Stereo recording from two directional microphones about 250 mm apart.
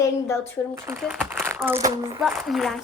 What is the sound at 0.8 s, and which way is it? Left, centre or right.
Speech, centre.